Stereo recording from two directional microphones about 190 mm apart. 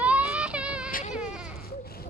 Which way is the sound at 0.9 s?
45° left (ahead or behind).